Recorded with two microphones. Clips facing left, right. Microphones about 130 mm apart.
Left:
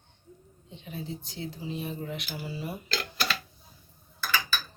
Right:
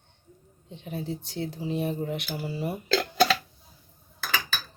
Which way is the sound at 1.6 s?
60° right (ahead or behind).